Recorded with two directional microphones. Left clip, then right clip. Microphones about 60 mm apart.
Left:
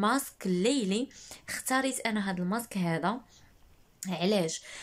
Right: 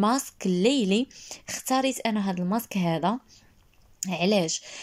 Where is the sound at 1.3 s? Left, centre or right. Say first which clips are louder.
Right 4 dB; right.